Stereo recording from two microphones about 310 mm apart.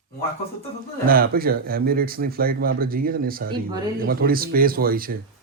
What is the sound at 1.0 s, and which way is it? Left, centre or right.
A man's voice, right.